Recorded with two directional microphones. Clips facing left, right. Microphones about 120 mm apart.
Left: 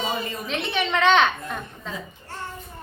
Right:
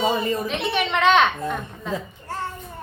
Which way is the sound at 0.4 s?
5° right (ahead or behind).